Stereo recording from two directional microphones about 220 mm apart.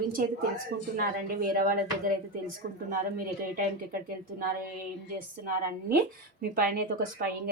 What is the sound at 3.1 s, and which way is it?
Speech, 40° right (ahead or behind).